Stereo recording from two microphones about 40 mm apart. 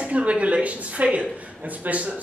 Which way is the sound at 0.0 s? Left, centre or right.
Right.